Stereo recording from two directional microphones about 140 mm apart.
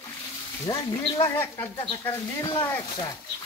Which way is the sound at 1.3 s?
15° left (ahead or behind).